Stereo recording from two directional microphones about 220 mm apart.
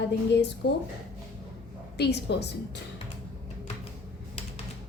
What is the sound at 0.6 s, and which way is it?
Speech, 50° left (ahead or behind).